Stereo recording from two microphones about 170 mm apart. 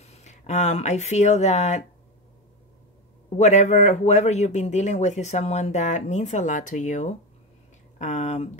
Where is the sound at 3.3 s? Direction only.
45° left (ahead or behind).